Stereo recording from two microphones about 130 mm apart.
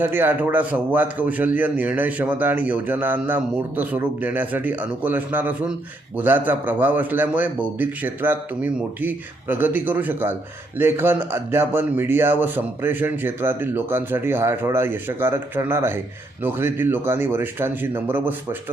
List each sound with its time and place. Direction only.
0.0 s a man's voice: 15° right (ahead or behind)